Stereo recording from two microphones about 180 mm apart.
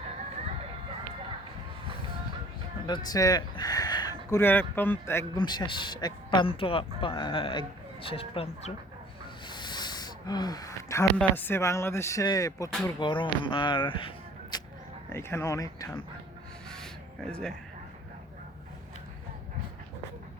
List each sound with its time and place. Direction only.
2.8 s speech: 25° left (ahead or behind)
9.5 s a sound: 25° left (ahead or behind)
11.2 s speech: 10° left (ahead or behind); by 14.1 s 25° left (ahead or behind)
14.5 s a sound: 20° left (ahead or behind)
15.1 s speech: 15° left (ahead or behind)
16.7 s music: 5° left (ahead or behind)